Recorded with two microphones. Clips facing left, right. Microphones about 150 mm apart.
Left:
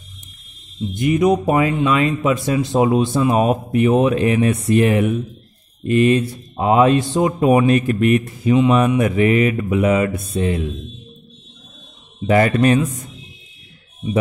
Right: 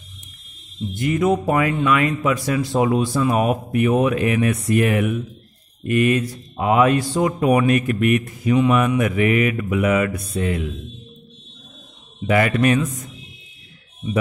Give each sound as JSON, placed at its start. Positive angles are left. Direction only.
{"t": 0.9, "sound": "speech", "side_deg": 20}
{"t": 12.3, "sound": "a man's voice", "side_deg": 35}